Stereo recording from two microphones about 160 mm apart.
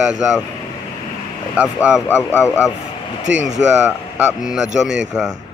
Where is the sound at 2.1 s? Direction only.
15° left (ahead or behind).